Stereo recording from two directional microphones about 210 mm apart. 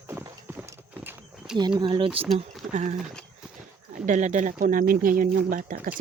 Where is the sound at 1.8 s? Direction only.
25° right (ahead or behind).